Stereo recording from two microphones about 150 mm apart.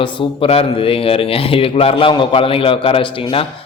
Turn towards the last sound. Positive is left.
turn(degrees=35)  # may be behind; listen again after turning